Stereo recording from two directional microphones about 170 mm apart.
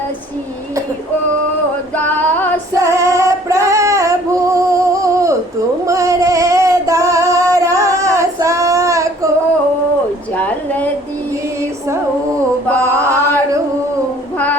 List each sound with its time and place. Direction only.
2.0 s female singing: 10° left (ahead or behind)
2.7 s female singing: 20° right (ahead or behind)
10.3 s a sound: 10° left (ahead or behind)
12.8 s chant: 15° right (ahead or behind)